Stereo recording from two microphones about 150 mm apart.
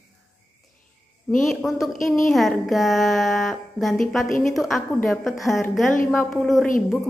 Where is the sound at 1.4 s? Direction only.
Centre (ahead or behind).